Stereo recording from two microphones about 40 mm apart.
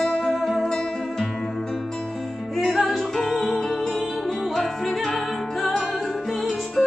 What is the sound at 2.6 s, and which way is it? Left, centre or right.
Music, centre.